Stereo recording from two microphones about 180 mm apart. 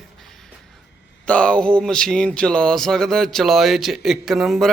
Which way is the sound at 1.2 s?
5° left (ahead or behind).